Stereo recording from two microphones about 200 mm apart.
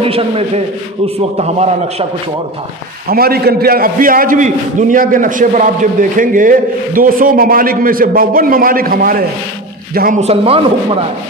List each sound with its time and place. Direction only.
0.0 s a man's voice: 30° right (ahead or behind)
3.1 s a man's voice: 50° right (ahead or behind)
10.2 s speech: 30° right (ahead or behind)